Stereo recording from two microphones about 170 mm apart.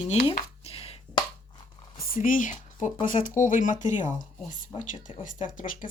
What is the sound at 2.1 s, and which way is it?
Speech, 50° left (ahead or behind).